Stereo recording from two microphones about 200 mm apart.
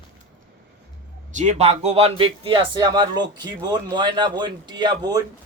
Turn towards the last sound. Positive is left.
turn(degrees=-20)  # may be behind; listen again after turning